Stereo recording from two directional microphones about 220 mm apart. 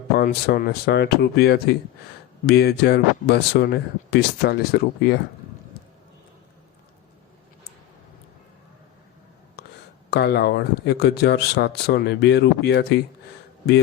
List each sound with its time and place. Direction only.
0.2 s speech: 45° left (ahead or behind)
9.6 s a sound: 45° left (ahead or behind)
10.1 s speech: 50° left (ahead or behind)